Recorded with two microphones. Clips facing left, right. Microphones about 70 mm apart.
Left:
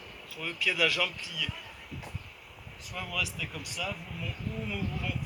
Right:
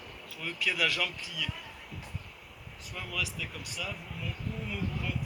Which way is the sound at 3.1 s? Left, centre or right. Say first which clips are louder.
Left 1 dB; right.